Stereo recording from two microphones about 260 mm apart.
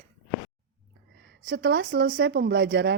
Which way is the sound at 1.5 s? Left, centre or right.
Right.